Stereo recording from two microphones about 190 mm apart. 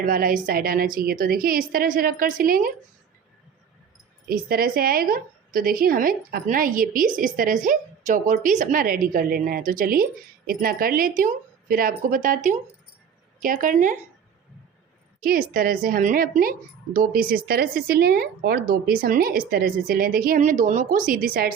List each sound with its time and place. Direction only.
0.0 s a woman's voice: 50° right (ahead or behind)
4.3 s a woman's voice: 50° right (ahead or behind)
15.2 s a woman's voice: 50° right (ahead or behind)